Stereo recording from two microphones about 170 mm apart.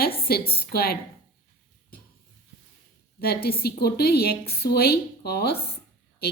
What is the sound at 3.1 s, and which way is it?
A woman's voice, 65° left (ahead or behind).